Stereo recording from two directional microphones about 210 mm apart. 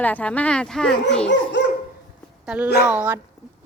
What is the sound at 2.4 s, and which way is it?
Speech, 5° right (ahead or behind).